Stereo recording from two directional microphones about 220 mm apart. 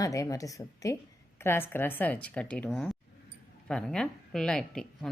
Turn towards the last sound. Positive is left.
turn(degrees=0)  # may be behind; listen again after turning